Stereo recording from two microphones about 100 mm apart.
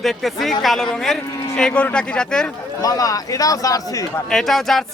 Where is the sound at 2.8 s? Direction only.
35° left (ahead or behind).